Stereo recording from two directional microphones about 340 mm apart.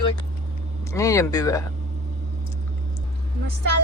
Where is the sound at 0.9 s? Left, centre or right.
Centre.